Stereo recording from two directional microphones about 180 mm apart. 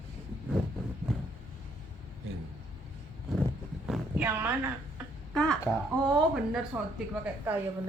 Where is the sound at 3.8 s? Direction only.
5° right (ahead or behind).